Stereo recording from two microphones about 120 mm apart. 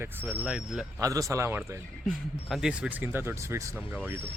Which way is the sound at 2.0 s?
Centre (ahead or behind).